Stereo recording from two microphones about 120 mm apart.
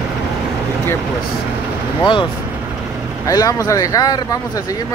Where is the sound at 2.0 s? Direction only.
40° left (ahead or behind).